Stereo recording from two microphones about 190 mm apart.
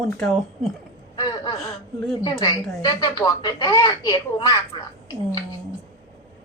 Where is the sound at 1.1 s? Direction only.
25° left (ahead or behind).